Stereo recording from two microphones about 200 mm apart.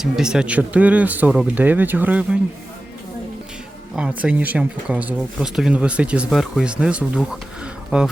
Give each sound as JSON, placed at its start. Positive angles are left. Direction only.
{"t": 0.0, "sound": "speech", "side_deg": -5}
{"t": 3.9, "sound": "speech", "side_deg": -5}